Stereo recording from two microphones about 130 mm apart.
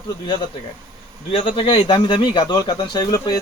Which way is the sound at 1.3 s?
45° left (ahead or behind).